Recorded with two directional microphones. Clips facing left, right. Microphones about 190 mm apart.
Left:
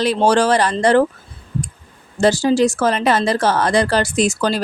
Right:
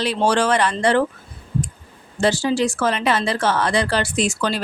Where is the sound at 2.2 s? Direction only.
40° left (ahead or behind).